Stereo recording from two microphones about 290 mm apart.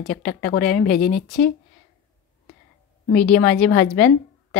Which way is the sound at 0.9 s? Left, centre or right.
Left.